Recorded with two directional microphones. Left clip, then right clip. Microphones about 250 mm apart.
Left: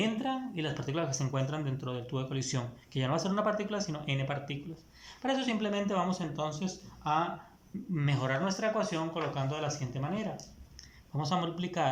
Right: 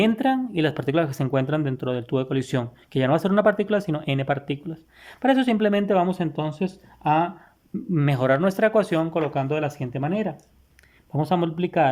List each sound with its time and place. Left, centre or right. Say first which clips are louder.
0.0 s speech: right 12 dB; right